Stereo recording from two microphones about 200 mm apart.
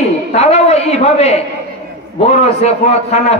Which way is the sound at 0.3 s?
30° left (ahead or behind).